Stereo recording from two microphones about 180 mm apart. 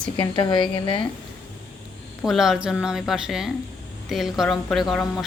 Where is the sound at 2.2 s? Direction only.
Centre (ahead or behind).